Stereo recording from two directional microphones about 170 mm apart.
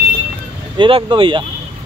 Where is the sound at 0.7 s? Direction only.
30° right (ahead or behind).